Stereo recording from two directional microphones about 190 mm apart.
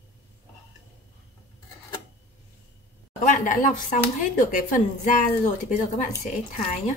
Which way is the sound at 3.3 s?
40° left (ahead or behind).